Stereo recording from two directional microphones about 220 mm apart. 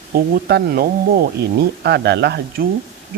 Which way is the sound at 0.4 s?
45° right (ahead or behind).